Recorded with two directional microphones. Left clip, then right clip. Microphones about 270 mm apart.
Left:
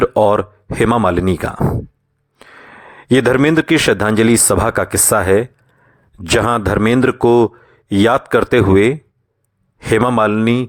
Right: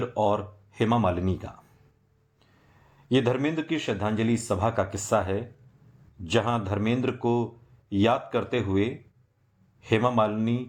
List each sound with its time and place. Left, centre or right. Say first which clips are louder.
0.0 s speech: left 13 dB; left
3.1 s speech: left 13 dB; left